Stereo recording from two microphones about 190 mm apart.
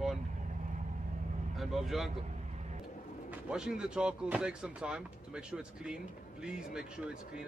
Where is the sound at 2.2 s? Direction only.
40° right (ahead or behind).